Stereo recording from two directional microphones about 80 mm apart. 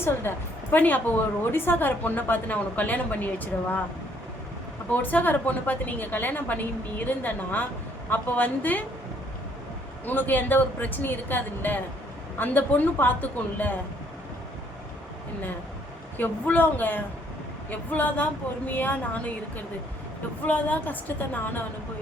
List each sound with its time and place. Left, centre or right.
0.0 s a woman's voice: left
4.9 s a woman's voice: left
10.1 s a woman's voice: left
16.1 s a woman's voice: left
20.4 s a woman's voice: left